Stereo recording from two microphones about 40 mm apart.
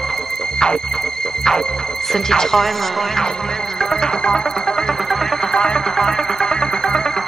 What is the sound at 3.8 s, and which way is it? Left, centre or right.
Music, centre.